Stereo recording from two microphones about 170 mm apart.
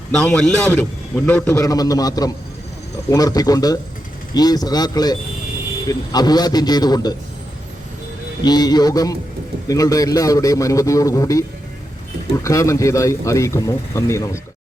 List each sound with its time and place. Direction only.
0.3 s a man's voice: 5° left (ahead or behind)
1.5 s a man's voice: 20° left (ahead or behind)
8.4 s a man's voice: 25° left (ahead or behind)